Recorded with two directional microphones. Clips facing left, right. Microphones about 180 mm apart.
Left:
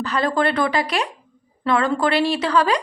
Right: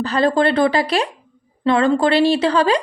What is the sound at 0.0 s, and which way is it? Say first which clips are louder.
A woman's voice: right 4 dB; 30° right (ahead or behind).